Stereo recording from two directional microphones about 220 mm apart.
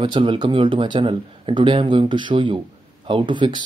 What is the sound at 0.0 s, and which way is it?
Speech, 20° right (ahead or behind).